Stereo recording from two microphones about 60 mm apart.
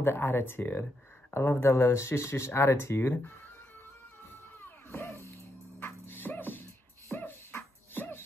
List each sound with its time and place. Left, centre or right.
0.0 s speech: left
4.6 s music: left
5.8 s music: left
7.1 s beatboxing: left